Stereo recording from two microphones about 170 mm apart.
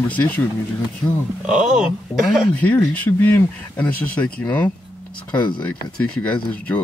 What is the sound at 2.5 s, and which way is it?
Speech, 10° left (ahead or behind).